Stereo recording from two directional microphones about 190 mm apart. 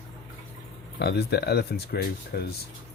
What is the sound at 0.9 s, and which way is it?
Speech, 60° left (ahead or behind).